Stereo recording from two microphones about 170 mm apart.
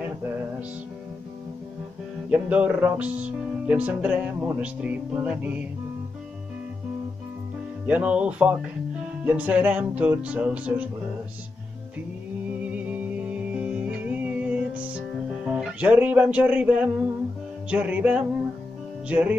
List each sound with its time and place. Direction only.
0.0 s music: 10° right (ahead or behind)
2.2 s music: 10° right (ahead or behind)
7.8 s music: 10° right (ahead or behind)
12.5 s music: 10° right (ahead or behind)